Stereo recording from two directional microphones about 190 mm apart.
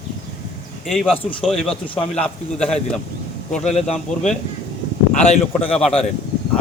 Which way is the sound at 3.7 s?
35° left (ahead or behind).